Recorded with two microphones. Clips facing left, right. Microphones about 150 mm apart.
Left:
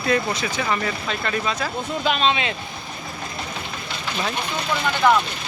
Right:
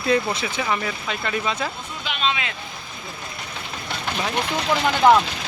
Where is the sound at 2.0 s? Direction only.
40° left (ahead or behind).